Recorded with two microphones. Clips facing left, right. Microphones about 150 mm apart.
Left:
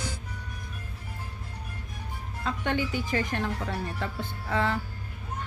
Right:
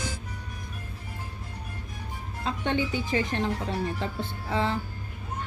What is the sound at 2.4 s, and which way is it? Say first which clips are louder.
Speech: right 1 dB; 20° right (ahead or behind).